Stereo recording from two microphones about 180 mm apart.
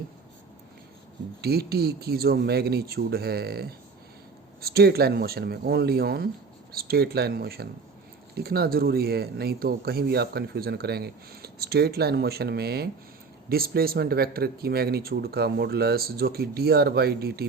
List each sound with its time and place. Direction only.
1.4 s speech: 60° right (ahead or behind)